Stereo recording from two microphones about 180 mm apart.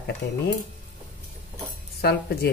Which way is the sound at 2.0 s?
65° left (ahead or behind).